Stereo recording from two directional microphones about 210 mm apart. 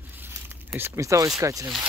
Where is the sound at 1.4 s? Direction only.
15° right (ahead or behind).